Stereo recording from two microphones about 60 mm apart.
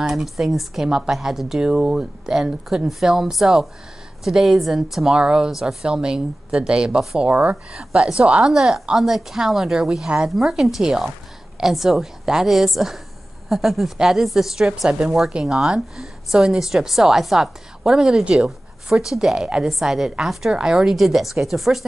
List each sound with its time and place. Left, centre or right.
0.0 s a woman's voice: centre
20.9 s a woman's voice: centre